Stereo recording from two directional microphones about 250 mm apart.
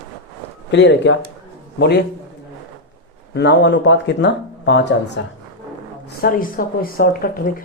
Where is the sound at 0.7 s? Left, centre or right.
Left.